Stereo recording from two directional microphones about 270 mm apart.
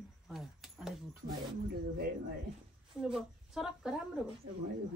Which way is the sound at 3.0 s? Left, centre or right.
Centre.